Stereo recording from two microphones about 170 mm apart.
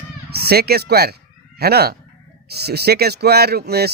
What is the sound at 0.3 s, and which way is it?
Speech, 70° right (ahead or behind).